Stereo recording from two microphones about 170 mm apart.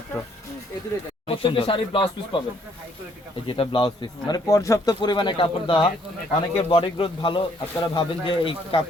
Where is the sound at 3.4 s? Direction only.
30° left (ahead or behind).